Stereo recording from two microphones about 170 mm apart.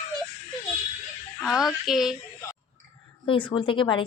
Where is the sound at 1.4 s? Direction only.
Centre (ahead or behind).